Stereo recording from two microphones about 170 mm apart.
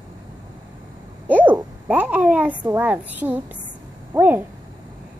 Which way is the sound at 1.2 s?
10° right (ahead or behind).